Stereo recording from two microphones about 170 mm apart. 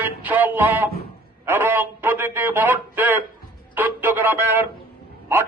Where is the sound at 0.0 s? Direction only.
10° right (ahead or behind).